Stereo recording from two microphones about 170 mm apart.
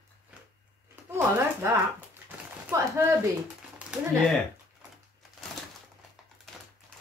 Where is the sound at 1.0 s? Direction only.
15° right (ahead or behind).